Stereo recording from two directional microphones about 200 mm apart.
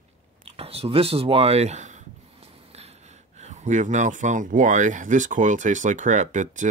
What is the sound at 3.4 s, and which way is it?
Speech, 35° right (ahead or behind).